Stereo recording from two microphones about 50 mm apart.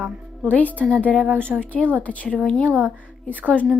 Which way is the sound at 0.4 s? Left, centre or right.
Left.